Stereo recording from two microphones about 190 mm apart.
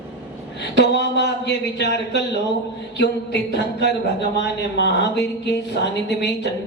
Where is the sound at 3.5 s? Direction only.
65° left (ahead or behind).